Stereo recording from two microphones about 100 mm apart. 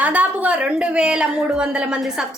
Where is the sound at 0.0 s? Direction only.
15° right (ahead or behind).